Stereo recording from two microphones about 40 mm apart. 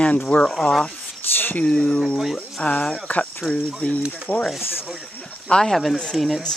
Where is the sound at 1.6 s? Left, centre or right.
Centre.